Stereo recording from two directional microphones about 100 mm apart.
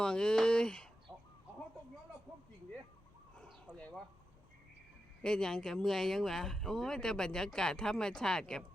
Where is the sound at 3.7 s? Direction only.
15° right (ahead or behind).